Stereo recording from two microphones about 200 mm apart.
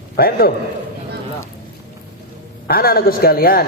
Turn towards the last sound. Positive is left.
turn(degrees=50)  # may be behind; listen again after turning